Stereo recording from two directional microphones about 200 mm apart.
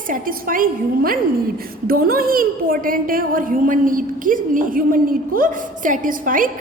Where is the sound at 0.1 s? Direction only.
45° right (ahead or behind).